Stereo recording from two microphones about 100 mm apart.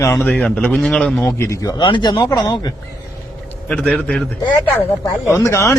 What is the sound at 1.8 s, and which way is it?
Speech, 50° left (ahead or behind).